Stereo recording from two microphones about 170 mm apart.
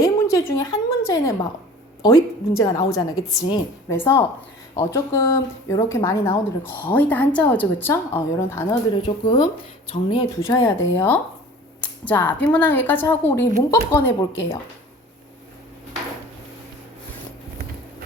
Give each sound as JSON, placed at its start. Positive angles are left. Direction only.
{"t": 0.0, "sound": "a woman's voice", "side_deg": 20}
{"t": 3.9, "sound": "a woman's voice", "side_deg": 15}
{"t": 9.0, "sound": "a woman's voice", "side_deg": 25}
{"t": 10.4, "sound": "a woman's voice", "side_deg": 15}
{"t": 11.8, "sound": "a sound", "side_deg": 10}
{"t": 12.5, "sound": "a woman's voice", "side_deg": 10}